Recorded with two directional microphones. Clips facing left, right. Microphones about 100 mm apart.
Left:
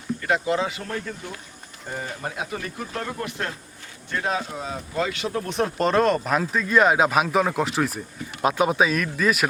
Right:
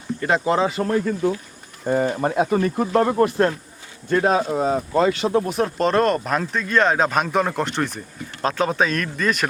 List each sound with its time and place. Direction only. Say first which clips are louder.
0.2 s speech: right 5 dB; 35° right (ahead or behind)
1.9 s speech: right 12 dB; 55° right (ahead or behind); by 5.4 s 35° right (ahead or behind)
5.5 s speech: right 2 dB; centre (ahead or behind)